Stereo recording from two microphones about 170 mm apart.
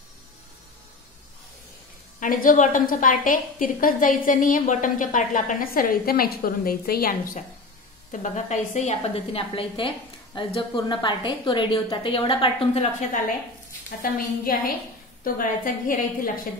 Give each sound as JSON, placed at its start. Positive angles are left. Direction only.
{"t": 2.1, "sound": "a woman's voice", "side_deg": 50}
{"t": 8.1, "sound": "a woman's voice", "side_deg": 45}
{"t": 13.8, "sound": "a woman's voice", "side_deg": 55}